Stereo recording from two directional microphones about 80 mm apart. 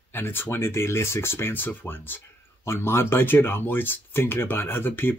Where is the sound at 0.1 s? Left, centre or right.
Left.